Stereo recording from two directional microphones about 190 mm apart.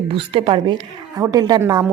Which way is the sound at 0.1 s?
25° right (ahead or behind).